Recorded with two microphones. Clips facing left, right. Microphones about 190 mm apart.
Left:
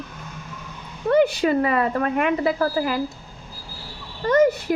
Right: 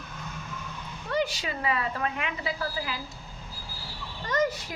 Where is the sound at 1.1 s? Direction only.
55° left (ahead or behind).